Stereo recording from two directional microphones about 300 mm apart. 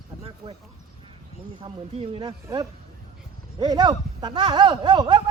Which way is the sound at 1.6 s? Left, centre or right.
Centre.